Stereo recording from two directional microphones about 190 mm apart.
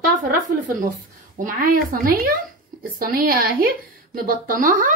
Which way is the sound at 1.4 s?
50° right (ahead or behind).